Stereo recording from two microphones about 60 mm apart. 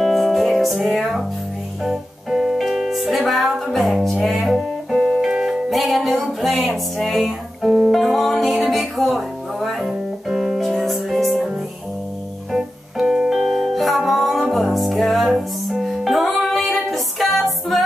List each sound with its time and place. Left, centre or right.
0.0 s music: centre
12.5 s music: centre